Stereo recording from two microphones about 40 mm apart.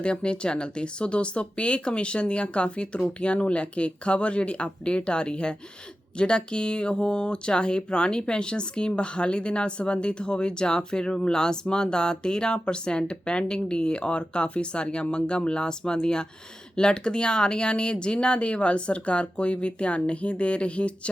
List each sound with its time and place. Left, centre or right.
0.0 s speech: left